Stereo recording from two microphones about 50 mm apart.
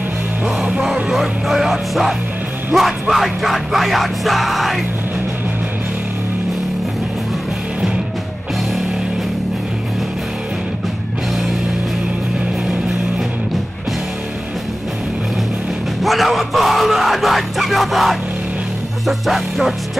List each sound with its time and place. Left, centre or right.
0.6 s music: centre
1.1 s speech: centre
16.0 s speech: centre